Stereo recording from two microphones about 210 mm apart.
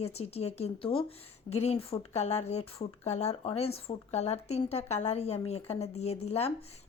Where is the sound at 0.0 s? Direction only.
30° left (ahead or behind).